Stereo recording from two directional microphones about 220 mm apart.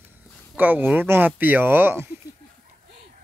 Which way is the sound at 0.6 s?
10° right (ahead or behind).